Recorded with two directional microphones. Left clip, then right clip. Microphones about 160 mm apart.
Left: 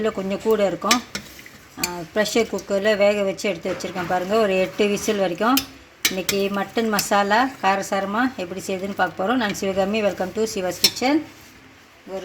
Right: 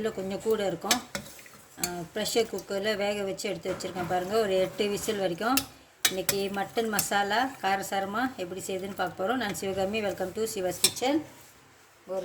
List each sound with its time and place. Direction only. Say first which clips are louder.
0.0 s speech: left 8 dB; 35° left (ahead or behind)
2.1 s speech: left 8 dB; 35° left (ahead or behind)